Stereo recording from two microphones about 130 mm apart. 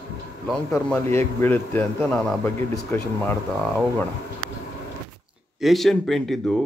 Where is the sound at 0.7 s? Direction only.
20° left (ahead or behind).